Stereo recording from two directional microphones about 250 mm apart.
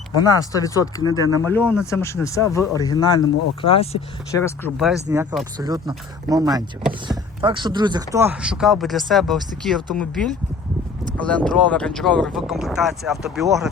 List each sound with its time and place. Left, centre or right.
0.3 s speech: centre
4.3 s speech: centre
5.0 s speech: centre